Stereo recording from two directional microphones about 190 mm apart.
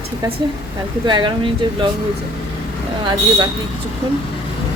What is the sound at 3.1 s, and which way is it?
Speech, 20° right (ahead or behind).